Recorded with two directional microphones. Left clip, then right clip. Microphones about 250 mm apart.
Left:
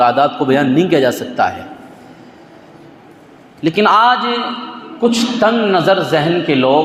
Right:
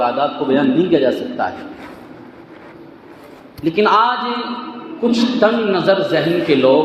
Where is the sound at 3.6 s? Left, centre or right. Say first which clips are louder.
Left 3 dB; left.